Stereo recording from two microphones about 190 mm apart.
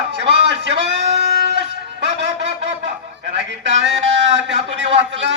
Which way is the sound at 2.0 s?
65° right (ahead or behind).